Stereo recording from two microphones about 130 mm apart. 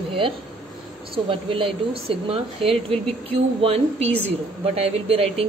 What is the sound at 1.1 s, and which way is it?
Speech, 45° right (ahead or behind).